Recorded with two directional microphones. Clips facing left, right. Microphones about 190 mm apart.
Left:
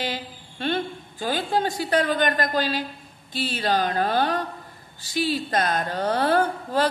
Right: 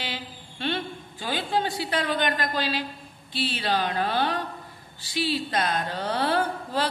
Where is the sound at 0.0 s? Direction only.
45° left (ahead or behind).